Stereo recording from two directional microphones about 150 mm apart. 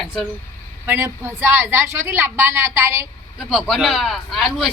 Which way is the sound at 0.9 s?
15° right (ahead or behind).